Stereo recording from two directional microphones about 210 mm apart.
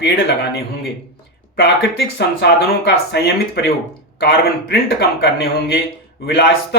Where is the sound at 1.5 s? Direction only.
50° left (ahead or behind).